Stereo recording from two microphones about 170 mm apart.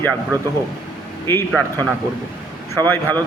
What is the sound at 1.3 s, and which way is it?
A man's voice, 10° left (ahead or behind).